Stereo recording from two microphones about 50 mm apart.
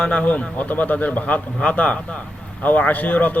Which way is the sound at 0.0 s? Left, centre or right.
Left.